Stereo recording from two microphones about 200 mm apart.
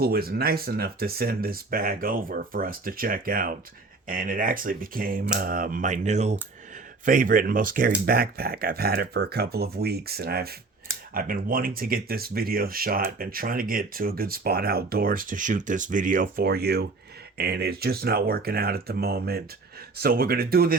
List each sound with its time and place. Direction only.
0.0 s speech: 50° right (ahead or behind)